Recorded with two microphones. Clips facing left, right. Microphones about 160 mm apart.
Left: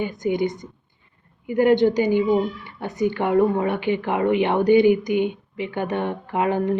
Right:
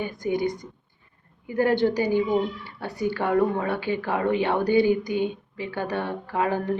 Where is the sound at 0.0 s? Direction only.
20° left (ahead or behind).